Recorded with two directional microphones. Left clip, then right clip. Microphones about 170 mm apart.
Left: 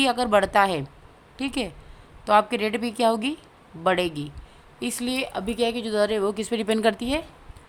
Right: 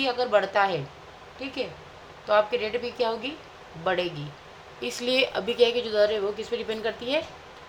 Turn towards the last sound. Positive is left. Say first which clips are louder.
# left 4 dB
turn(degrees=55)  # may be behind; listen again after turning